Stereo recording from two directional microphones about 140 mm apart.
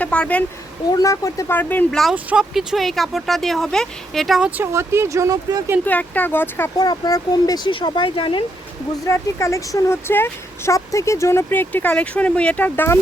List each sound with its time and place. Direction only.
0.0 s speech: 10° left (ahead or behind)
0.9 s speech: 25° left (ahead or behind); by 4.6 s 5° right (ahead or behind)
4.6 s speech: 20° right (ahead or behind)
5.8 s speech: 10° left (ahead or behind)
6.7 s speech: 30° left (ahead or behind)
9.0 s speech: 20° left (ahead or behind)